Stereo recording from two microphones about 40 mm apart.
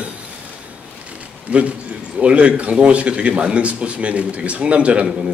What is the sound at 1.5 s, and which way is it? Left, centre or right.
Speech, right.